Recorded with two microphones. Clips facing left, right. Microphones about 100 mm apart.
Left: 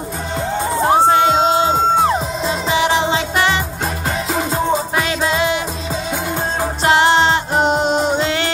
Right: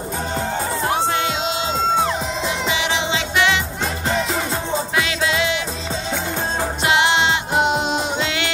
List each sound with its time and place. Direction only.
0.8 s music: 35° left (ahead or behind)
4.3 s music: 20° left (ahead or behind)
4.9 s music: 40° left (ahead or behind)
6.8 s music: 40° left (ahead or behind)